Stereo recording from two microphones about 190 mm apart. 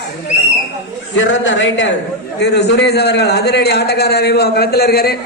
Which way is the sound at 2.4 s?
65° left (ahead or behind).